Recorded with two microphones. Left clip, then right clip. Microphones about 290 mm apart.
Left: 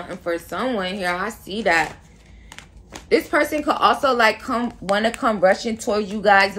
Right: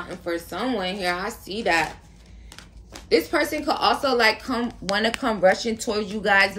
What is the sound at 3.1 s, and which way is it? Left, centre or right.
A woman's voice, centre.